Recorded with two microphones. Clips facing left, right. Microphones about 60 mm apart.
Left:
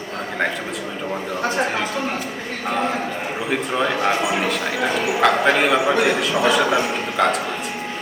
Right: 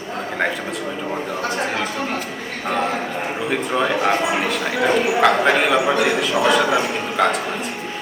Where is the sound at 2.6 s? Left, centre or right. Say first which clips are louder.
Right 1 dB; centre.